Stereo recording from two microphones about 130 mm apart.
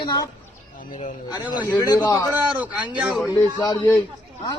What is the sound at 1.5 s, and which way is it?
Speech, 20° right (ahead or behind).